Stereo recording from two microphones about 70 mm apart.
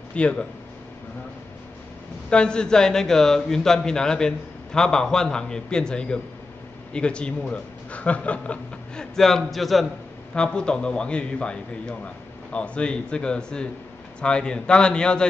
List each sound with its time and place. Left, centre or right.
0.1 s a man's voice: centre
2.2 s a man's voice: centre
9.1 s a man's voice: centre
10.3 s a man's voice: centre